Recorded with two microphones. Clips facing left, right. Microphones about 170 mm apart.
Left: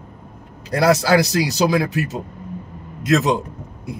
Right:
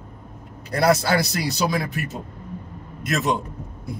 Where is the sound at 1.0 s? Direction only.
85° left.